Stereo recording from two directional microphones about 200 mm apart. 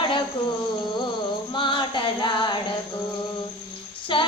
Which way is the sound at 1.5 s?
25° left (ahead or behind).